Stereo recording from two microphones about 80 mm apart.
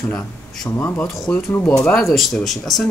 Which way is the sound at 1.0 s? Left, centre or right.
Centre.